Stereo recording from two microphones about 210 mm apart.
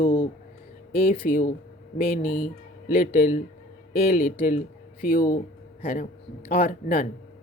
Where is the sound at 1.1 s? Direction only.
40° left (ahead or behind).